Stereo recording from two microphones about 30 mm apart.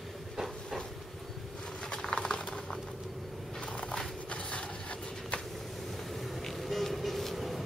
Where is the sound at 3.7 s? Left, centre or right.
Left.